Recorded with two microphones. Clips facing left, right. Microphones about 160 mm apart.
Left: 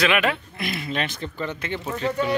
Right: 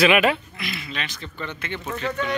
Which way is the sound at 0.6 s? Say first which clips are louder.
Left 5 dB; 50° left (ahead or behind).